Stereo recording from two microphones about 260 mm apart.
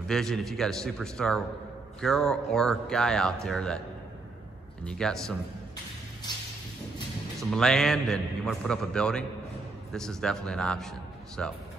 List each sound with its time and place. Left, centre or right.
0.1 s speech: centre
4.8 s speech: centre
6.3 s music: centre
7.5 s speech: centre